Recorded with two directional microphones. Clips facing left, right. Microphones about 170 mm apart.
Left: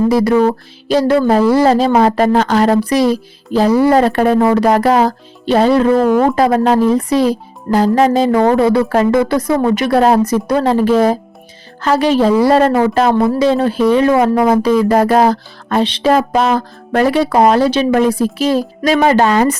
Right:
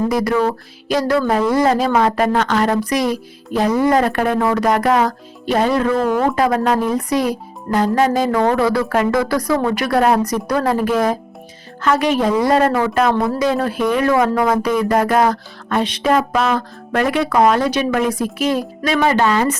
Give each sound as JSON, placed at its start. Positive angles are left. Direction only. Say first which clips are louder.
{"t": 0.1, "sound": "a woman's voice", "louder": "left 6 dB", "side_deg": 25}